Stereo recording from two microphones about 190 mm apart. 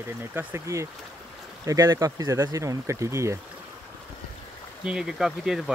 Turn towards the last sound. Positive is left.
turn(degrees=0)  # may be behind; listen again after turning